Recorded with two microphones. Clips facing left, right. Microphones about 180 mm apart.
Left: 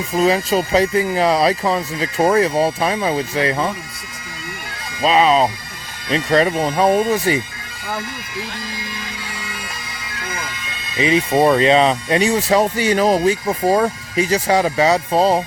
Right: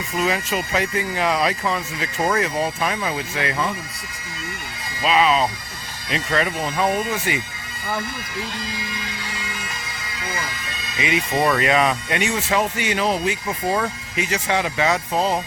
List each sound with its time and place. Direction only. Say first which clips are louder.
0.1 s speech: left 7 dB; 35° left (ahead or behind)
5.0 s speech: left 4 dB; 35° left (ahead or behind)
10.9 s speech: left 6 dB; 30° left (ahead or behind)